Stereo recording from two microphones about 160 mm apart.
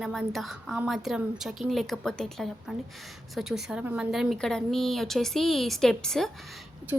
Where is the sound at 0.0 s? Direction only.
Centre (ahead or behind).